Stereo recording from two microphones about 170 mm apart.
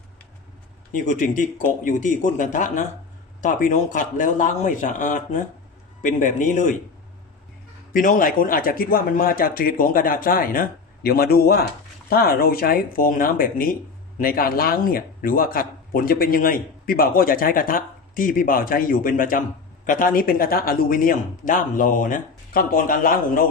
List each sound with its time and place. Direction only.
1.0 s speech: 50° left (ahead or behind)
7.9 s a man's voice: 55° left (ahead or behind)